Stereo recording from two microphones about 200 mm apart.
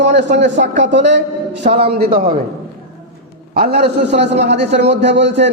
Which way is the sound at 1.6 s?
30° right (ahead or behind).